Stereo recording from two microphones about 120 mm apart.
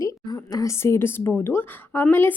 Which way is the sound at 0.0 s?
30° left (ahead or behind).